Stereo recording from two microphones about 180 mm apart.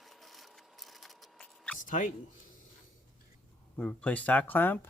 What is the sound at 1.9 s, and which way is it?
Speech, 45° left (ahead or behind).